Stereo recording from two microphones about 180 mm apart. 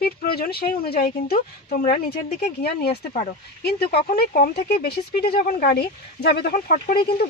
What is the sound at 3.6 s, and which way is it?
Speech, 60° left (ahead or behind).